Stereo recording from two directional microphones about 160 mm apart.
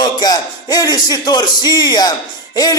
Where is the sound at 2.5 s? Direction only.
25° left (ahead or behind).